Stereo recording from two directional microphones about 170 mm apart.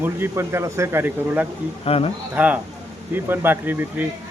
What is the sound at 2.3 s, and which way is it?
Speech, 10° right (ahead or behind).